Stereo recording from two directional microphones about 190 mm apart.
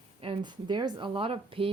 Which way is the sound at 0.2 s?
25° right (ahead or behind).